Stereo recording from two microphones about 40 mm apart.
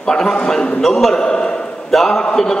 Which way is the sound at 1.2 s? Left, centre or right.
Left.